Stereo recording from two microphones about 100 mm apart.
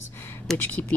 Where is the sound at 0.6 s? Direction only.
15° left (ahead or behind).